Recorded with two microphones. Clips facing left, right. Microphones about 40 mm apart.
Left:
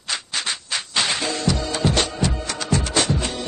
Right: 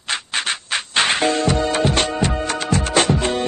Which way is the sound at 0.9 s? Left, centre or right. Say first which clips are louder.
Right 6 dB; right.